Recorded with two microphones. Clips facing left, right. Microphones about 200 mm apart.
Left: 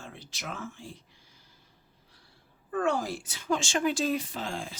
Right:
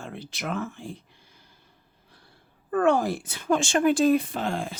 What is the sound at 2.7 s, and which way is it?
Speech, 60° right (ahead or behind).